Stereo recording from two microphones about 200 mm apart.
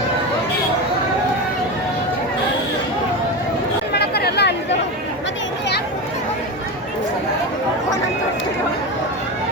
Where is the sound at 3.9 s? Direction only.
55° left (ahead or behind).